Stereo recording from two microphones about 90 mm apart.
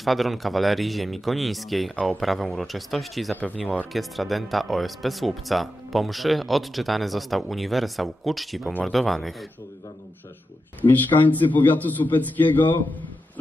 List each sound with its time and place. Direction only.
0.0 s speech: centre (ahead or behind)
3.3 s speech: 15° left (ahead or behind)
3.9 s speech: centre (ahead or behind)
10.8 s a man's voice: 20° left (ahead or behind)